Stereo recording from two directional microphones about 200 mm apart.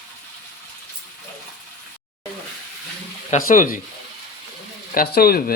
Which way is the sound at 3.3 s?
40° left (ahead or behind).